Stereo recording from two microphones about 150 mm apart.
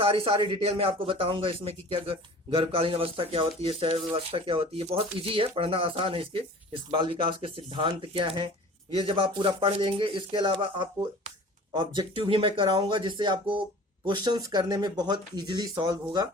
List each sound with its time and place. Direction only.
0.0 s speech: 40° right (ahead or behind)